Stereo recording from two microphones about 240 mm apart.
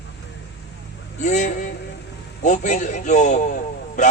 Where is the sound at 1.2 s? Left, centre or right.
Left.